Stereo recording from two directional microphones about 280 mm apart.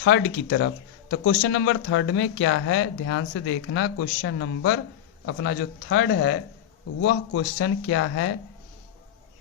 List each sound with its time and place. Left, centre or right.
0.0 s speech: left
1.1 s speech: left
1.4 s speech: left